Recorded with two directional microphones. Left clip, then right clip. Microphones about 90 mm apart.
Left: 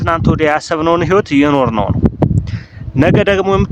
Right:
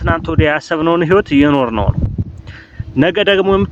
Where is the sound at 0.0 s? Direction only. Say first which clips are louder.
Left 2 dB; 40° left (ahead or behind).